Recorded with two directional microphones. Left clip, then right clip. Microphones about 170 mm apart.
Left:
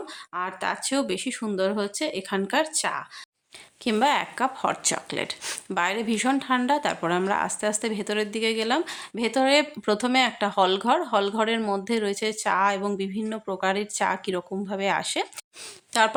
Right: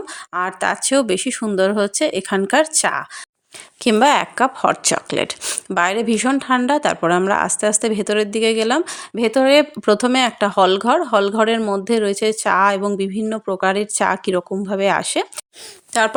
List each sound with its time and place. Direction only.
0.3 s speech: 45° right (ahead or behind)
15.9 s speech: 25° right (ahead or behind)